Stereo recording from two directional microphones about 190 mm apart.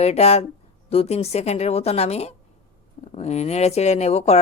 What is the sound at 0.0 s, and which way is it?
A woman's voice, 35° left (ahead or behind).